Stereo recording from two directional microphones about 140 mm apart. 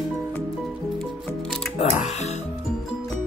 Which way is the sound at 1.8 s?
50° left (ahead or behind).